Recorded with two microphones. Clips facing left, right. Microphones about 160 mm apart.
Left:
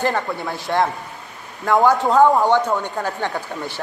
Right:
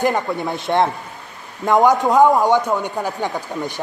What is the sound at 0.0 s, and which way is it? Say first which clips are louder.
A woman's voice: right 3 dB; 20° right (ahead or behind).